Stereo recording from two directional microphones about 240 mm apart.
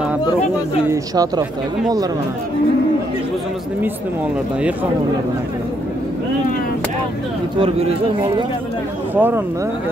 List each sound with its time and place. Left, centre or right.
0.8 s speech: centre
9.1 s speech: centre